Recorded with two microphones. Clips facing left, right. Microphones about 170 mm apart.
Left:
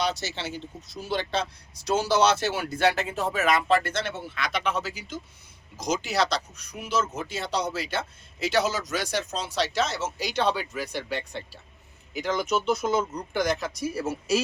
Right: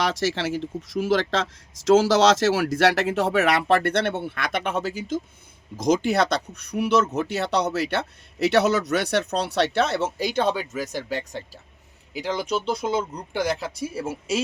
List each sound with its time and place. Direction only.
0.0 s speech: 90° right; by 14.4 s 25° right (ahead or behind)